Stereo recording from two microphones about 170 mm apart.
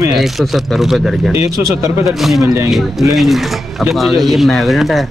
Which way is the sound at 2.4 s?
20° right (ahead or behind).